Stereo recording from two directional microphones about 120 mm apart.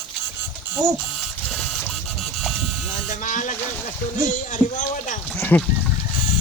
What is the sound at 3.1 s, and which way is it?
Speech, 90° left.